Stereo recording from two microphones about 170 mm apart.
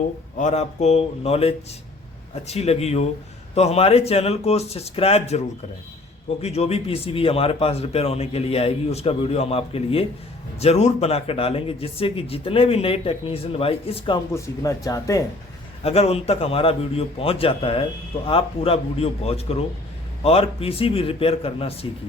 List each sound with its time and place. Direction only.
0.3 s a man's voice: 40° left (ahead or behind)
14.3 s speech: 20° left (ahead or behind)
15.8 s a man's voice: 35° left (ahead or behind)